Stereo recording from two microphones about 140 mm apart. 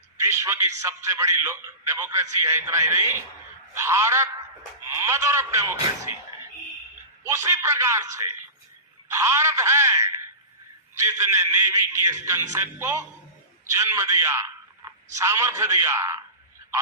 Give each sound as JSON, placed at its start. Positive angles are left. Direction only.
{"t": 0.2, "sound": "a man's voice", "side_deg": -20}
{"t": 7.3, "sound": "a man's voice", "side_deg": -20}